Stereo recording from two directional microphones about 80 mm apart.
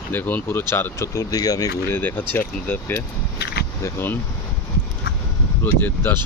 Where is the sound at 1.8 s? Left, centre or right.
Left.